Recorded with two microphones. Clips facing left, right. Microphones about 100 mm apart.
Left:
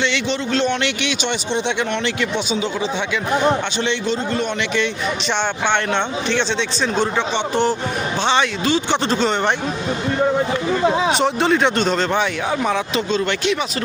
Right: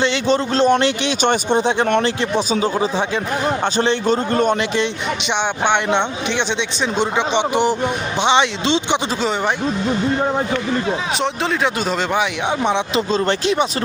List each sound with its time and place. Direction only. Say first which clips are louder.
0.0 s a man's voice: right 4 dB; 35° right (ahead or behind)
5.6 s a man's voice: right 3 dB; 15° right (ahead or behind)
11.2 s speech: left 3 dB; centre (ahead or behind)
12.5 s speech: right 1 dB; 25° right (ahead or behind)
13.1 s speech: right 2 dB; 35° right (ahead or behind)